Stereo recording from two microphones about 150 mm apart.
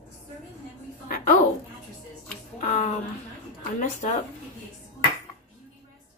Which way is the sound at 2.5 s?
50° left (ahead or behind).